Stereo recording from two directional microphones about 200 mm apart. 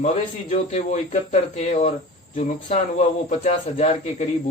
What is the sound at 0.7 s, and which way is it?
Speech, 35° left (ahead or behind).